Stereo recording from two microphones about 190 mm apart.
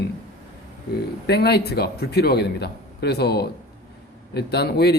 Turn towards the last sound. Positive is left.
turn(degrees=60)  # may be behind; listen again after turning